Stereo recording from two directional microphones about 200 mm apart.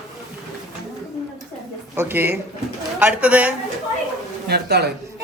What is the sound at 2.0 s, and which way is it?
A man's voice, 10° right (ahead or behind).